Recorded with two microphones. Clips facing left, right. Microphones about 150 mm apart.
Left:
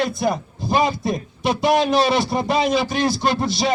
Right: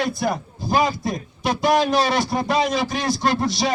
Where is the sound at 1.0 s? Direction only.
Centre (ahead or behind).